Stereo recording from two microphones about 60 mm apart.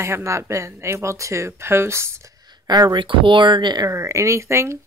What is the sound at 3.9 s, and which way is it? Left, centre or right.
Speech, right.